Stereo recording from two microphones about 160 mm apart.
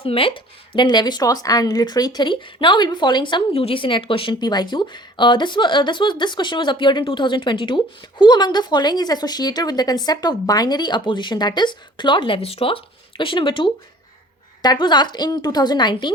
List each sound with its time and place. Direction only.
0.0 s speech: 35° left (ahead or behind)